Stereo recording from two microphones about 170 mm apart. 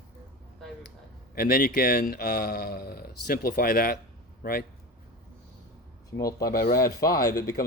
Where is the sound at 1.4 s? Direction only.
60° left (ahead or behind).